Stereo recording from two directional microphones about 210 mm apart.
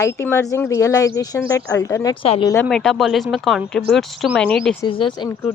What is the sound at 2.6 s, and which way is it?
Speech, centre (ahead or behind).